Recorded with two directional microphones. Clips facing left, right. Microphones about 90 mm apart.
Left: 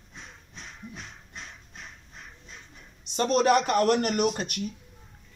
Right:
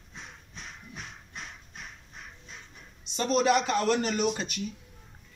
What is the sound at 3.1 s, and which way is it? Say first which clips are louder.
Speech: left 3 dB; 55° left (ahead or behind).